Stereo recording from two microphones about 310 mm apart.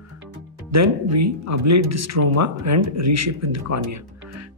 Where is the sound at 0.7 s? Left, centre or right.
Right.